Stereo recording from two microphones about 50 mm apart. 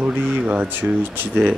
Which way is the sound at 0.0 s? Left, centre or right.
Right.